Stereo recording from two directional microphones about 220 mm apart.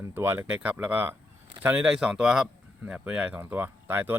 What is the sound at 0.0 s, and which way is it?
Speech, 10° right (ahead or behind).